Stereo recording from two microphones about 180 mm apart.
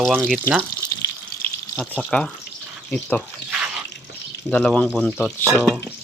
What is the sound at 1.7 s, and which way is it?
Speech, 5° left (ahead or behind).